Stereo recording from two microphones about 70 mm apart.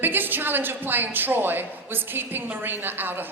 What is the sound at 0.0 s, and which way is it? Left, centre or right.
A woman's voice, right.